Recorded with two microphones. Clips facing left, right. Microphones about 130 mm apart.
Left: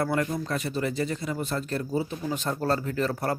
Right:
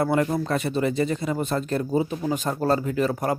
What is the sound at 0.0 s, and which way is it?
Speech, 25° right (ahead or behind).